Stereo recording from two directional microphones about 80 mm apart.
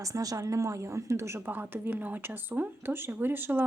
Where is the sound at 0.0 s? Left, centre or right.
Right.